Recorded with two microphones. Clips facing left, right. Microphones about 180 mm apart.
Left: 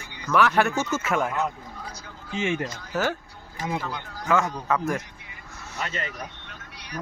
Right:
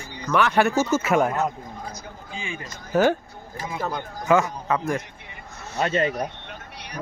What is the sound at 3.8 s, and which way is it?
Speech, 45° right (ahead or behind).